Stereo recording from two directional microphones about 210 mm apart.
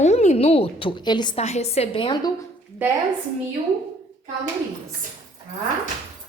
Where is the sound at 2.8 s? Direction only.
10° right (ahead or behind).